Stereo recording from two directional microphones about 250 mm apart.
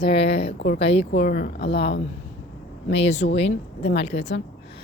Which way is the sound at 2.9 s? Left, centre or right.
Left.